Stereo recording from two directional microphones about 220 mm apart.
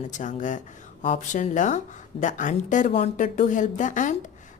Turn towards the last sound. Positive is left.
turn(degrees=35)  # may be behind; listen again after turning